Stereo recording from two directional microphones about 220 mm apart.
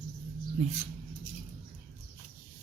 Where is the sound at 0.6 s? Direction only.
30° right (ahead or behind).